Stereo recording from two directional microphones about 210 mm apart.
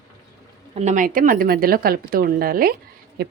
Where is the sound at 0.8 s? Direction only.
35° right (ahead or behind).